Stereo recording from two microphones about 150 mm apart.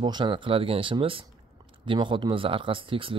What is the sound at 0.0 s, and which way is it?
Speech, 30° right (ahead or behind).